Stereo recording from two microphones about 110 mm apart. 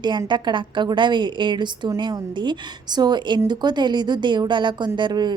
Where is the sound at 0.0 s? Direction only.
45° right (ahead or behind).